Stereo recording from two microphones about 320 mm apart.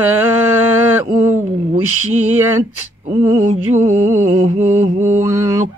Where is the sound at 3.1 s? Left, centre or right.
Centre.